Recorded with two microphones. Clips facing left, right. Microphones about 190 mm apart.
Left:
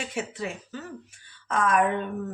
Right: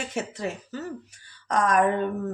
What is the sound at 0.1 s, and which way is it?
A woman's voice, 40° right (ahead or behind).